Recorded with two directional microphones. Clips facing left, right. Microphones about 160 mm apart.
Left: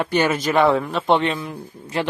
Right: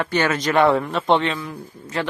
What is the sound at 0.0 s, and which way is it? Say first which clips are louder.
Speech: left 1 dB; 10° left (ahead or behind).